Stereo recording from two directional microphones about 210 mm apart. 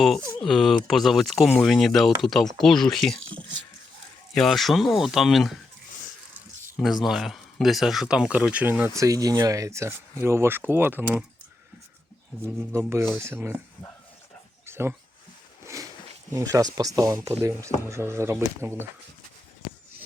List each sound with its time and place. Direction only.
0.4 s speech: centre (ahead or behind)
4.4 s speech: centre (ahead or behind)
6.7 s speech: centre (ahead or behind)
12.5 s speech: 10° right (ahead or behind)
14.7 s a sound: 10° right (ahead or behind)
16.3 s speech: 15° right (ahead or behind)